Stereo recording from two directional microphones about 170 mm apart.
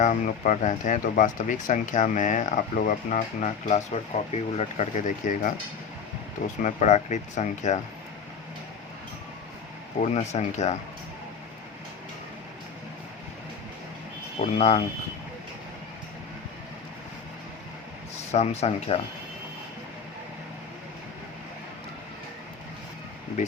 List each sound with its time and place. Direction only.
0.0 s speech: 50° left (ahead or behind)
6.6 s speech: 45° left (ahead or behind)
10.0 s speech: 40° left (ahead or behind)
14.4 s speech: 40° left (ahead or behind)
18.3 s speech: 40° left (ahead or behind)